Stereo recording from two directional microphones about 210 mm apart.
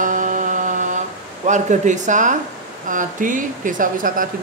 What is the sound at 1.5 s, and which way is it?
Speech, 35° right (ahead or behind).